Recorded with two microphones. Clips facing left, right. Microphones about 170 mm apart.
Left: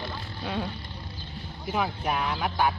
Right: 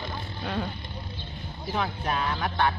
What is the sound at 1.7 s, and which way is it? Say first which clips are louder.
Speech: left 1 dB; 10° left (ahead or behind).